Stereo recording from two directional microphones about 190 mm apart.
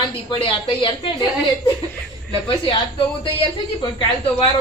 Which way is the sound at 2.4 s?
25° left (ahead or behind).